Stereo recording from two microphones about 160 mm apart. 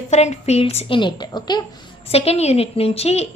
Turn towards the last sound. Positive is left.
turn(degrees=40)  # may be behind; listen again after turning